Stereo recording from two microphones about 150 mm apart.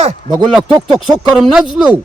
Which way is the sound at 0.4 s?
5° right (ahead or behind).